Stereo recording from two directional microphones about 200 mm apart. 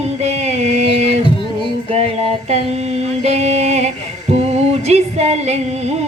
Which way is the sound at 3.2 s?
35° right (ahead or behind).